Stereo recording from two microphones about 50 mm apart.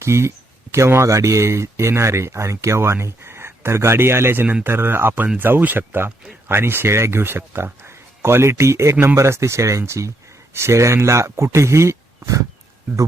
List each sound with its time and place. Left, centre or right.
0.0 s speech: right
10.5 s speech: right